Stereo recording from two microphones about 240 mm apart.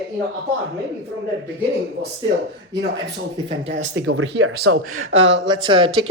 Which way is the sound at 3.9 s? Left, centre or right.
Right.